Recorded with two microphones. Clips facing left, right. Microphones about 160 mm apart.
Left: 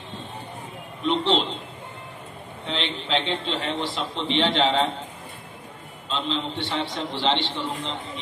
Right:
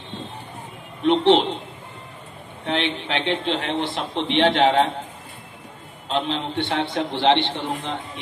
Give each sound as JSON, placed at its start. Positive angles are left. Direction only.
{"t": 1.0, "sound": "a sound", "side_deg": -60}
{"t": 2.6, "sound": "a man's voice", "side_deg": -60}
{"t": 6.0, "sound": "a man's voice", "side_deg": -65}